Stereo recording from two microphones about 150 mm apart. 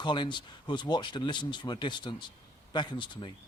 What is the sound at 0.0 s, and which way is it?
Speech, 30° left (ahead or behind).